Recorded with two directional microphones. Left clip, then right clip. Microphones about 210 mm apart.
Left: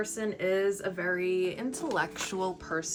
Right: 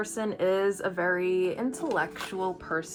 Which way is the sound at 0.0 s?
25° right (ahead or behind).